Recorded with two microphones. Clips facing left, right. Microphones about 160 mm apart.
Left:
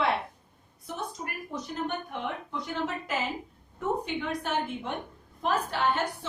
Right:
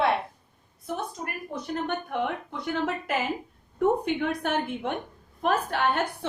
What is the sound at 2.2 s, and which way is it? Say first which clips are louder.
A woman's voice: right 4 dB; 60° right (ahead or behind).